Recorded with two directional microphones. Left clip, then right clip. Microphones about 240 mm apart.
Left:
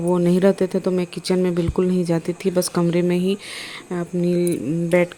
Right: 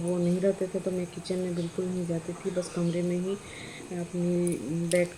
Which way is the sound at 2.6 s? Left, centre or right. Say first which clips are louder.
Left 10 dB; left.